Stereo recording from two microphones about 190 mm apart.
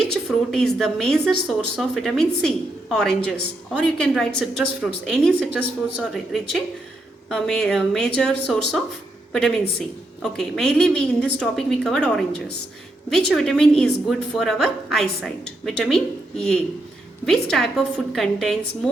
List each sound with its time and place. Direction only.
0.1 s speech: centre (ahead or behind)
10.3 s speech: 5° left (ahead or behind)